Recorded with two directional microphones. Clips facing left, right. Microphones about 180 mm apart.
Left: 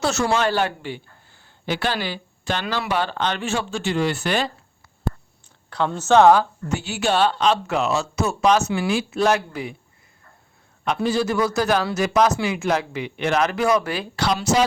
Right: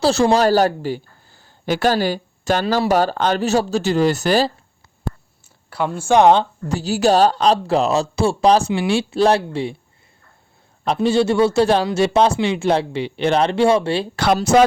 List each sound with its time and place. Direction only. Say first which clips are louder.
0.0 s speech: right 6 dB; 30° right (ahead or behind)
5.7 s speech: right 1 dB; 10° right (ahead or behind); by 9.7 s 30° right (ahead or behind)
10.8 s speech: right 5 dB; 30° right (ahead or behind)
14.2 s speech: right 5 dB; 55° right (ahead or behind)